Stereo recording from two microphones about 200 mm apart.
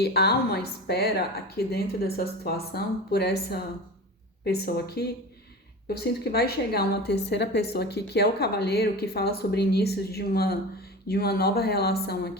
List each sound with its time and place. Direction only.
0.0 s a woman's voice: 55° left (ahead or behind)